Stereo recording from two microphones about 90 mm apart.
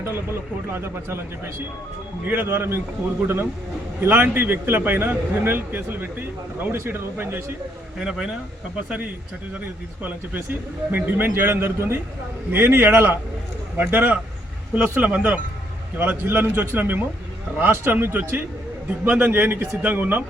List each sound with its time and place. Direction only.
0.0 s speech: 30° right (ahead or behind)
4.0 s speech: 25° right (ahead or behind)
7.9 s speech: 10° right (ahead or behind)
10.0 s speech: 20° right (ahead or behind)